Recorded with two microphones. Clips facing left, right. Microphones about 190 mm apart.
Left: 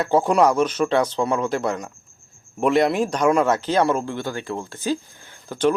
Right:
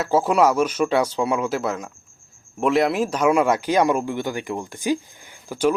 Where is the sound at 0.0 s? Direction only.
5° right (ahead or behind).